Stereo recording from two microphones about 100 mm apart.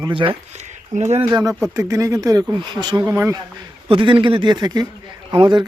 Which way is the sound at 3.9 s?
55° right (ahead or behind).